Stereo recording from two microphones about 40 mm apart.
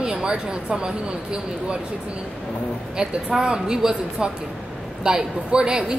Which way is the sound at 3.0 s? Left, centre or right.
Right.